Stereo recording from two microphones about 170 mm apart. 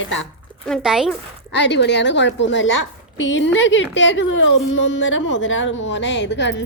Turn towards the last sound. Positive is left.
turn(degrees=90)